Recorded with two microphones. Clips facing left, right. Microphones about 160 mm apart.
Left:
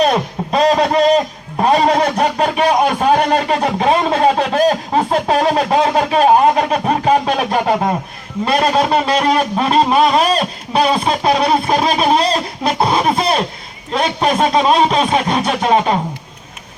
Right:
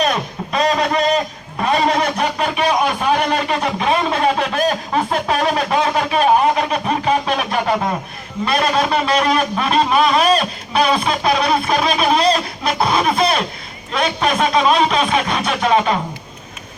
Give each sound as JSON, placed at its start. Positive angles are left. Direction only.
{"t": 0.0, "sound": "a man's voice", "side_deg": 35}